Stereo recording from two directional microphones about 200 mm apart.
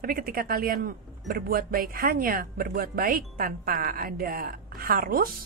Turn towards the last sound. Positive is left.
turn(degrees=-45)  # may be behind; listen again after turning